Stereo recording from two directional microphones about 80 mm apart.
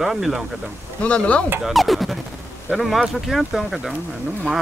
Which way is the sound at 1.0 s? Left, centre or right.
Centre.